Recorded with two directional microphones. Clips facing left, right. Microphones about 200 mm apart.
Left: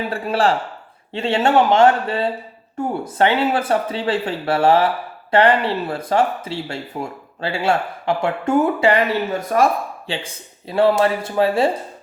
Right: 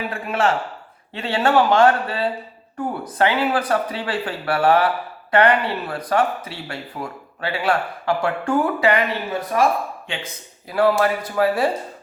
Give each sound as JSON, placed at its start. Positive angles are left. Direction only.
{"t": 0.1, "sound": "speech", "side_deg": 35}
{"t": 9.5, "sound": "speech", "side_deg": 45}
{"t": 10.1, "sound": "speech", "side_deg": 30}